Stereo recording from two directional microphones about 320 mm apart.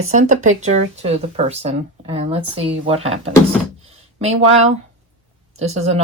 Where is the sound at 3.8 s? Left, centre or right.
Centre.